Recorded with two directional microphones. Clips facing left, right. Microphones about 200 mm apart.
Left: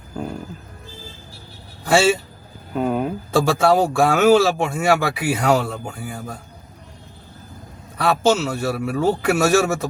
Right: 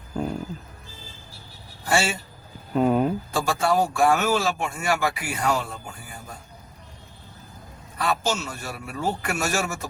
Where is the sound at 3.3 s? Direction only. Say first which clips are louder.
Left 8 dB; 75° left (ahead or behind).